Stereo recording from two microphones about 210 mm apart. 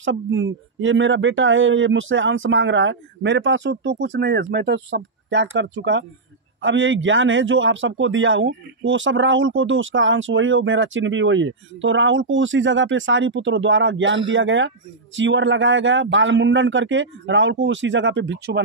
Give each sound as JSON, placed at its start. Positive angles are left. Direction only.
{"t": 0.0, "sound": "a man's voice", "side_deg": -65}